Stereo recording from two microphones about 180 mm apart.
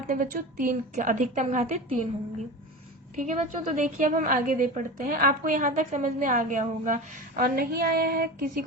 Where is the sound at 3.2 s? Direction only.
40° right (ahead or behind); by 8.6 s 55° right (ahead or behind).